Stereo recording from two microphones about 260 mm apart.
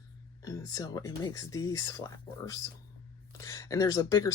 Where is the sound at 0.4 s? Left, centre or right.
Centre.